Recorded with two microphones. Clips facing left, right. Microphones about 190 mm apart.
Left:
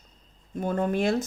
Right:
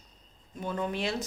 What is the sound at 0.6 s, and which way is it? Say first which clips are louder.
Speech: left 7 dB; 45° left (ahead or behind).